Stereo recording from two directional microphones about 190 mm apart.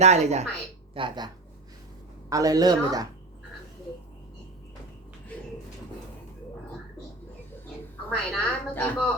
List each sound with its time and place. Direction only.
0.0 s speech: 35° right (ahead or behind)
0.9 s speech: 25° right (ahead or behind)
2.3 s speech: 20° right (ahead or behind)
8.1 s a woman's voice: 5° left (ahead or behind)